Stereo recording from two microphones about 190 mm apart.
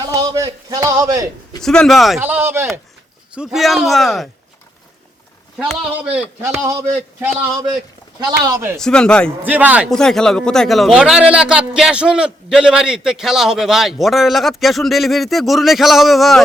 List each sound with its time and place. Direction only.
0.0 s a man's voice: 20° right (ahead or behind)
1.6 s a man's voice: 5° left (ahead or behind)
5.5 s a man's voice: 5° right (ahead or behind)
8.3 s speech: 15° right (ahead or behind)
8.8 s a man's voice: 5° left (ahead or behind)
9.4 s speech: 10° right (ahead or behind)
9.9 s a man's voice: 5° left (ahead or behind)